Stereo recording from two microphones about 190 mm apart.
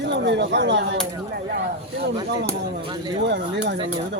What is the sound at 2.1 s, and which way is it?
Speech, 20° right (ahead or behind).